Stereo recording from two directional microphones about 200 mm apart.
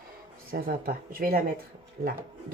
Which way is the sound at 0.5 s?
50° right (ahead or behind).